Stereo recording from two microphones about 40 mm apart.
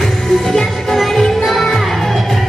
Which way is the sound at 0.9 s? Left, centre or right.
Centre.